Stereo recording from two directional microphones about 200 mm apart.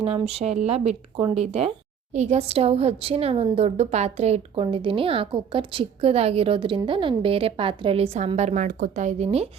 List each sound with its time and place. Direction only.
0.0 s a woman's voice: 30° right (ahead or behind)